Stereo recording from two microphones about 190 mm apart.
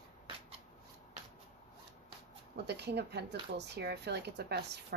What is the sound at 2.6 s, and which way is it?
A woman's voice, 60° right (ahead or behind).